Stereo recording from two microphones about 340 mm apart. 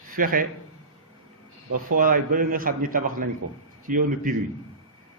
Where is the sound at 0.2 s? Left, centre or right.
Right.